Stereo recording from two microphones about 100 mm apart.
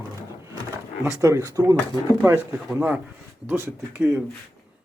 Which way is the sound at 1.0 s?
30° right (ahead or behind).